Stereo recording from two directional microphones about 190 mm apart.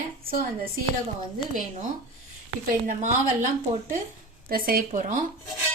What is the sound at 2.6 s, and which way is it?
Speech, 40° right (ahead or behind).